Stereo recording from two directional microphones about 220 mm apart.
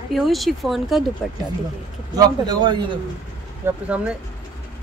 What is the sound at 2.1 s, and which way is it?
Speech, 20° right (ahead or behind).